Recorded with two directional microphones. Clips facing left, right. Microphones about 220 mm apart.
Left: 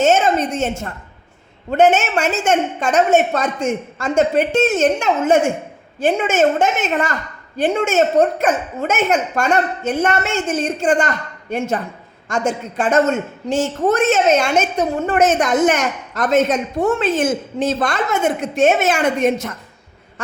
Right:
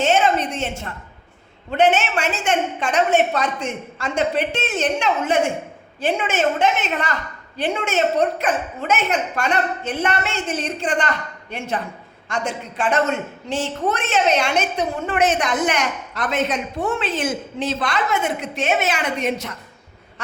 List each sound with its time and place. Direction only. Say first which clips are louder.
0.0 s a woman's voice: left 3 dB; 45° left (ahead or behind)